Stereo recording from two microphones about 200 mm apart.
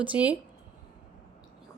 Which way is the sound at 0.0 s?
5° right (ahead or behind).